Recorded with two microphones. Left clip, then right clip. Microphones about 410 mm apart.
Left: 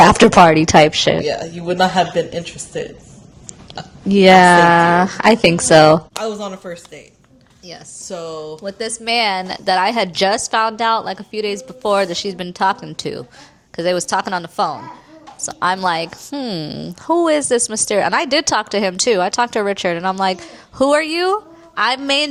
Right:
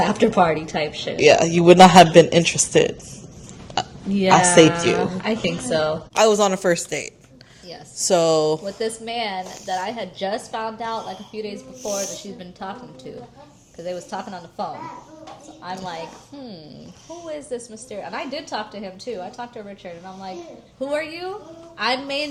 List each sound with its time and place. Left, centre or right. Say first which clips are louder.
0.2 s a woman's voice: left 9 dB; left
1.2 s speech: right 8 dB; right
3.8 s a sound: right 7 dB; right
4.1 s a woman's voice: left 7 dB; left
6.2 s speech: right 8 dB; right
9.0 s a woman's voice: left 9 dB; left
20.7 s speech: left 11 dB; left
21.8 s a woman's voice: left 7 dB; left